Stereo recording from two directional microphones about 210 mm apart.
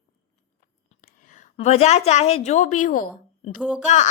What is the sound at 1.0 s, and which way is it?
A woman's voice, 40° left (ahead or behind).